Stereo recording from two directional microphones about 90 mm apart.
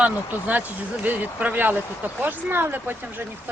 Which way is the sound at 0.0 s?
20° right (ahead or behind).